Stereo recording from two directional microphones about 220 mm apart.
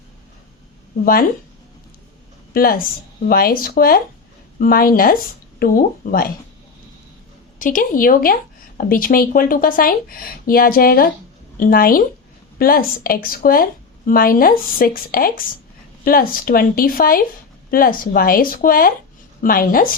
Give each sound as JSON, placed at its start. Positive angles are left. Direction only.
{"t": 2.5, "sound": "a woman's voice", "side_deg": 40}
{"t": 7.6, "sound": "speech", "side_deg": 35}